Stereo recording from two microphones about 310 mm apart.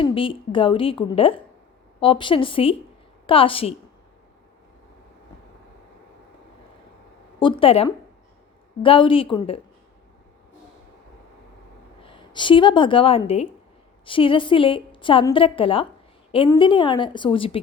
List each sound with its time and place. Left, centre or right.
0.0 s a woman's voice: centre
7.3 s a woman's voice: centre
12.0 s a woman's voice: centre